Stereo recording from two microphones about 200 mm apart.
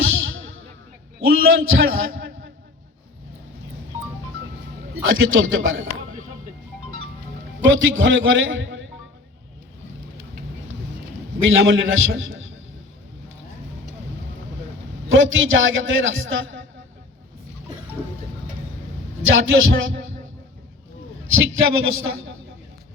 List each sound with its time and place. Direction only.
0.0 s music: 75° right (ahead or behind)
1.2 s a man's voice: 75° right (ahead or behind)
5.0 s a man's voice: 80° right
7.6 s a man's voice: 75° right (ahead or behind)
11.4 s a man's voice: 75° right (ahead or behind)
15.1 s a man's voice: 75° right (ahead or behind)
19.3 s speech: 65° right (ahead or behind)
21.3 s a man's voice: 80° right